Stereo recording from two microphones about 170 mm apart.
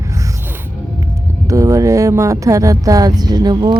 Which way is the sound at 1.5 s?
20° right (ahead or behind).